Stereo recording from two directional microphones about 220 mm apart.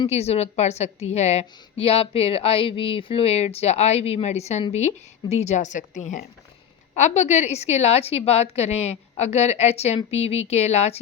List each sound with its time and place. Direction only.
0.0 s speech: 30° left (ahead or behind)